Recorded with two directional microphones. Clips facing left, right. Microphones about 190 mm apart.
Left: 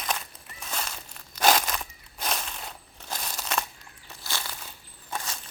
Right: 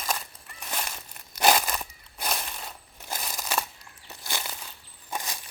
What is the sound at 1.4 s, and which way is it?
Crushing, 10° right (ahead or behind).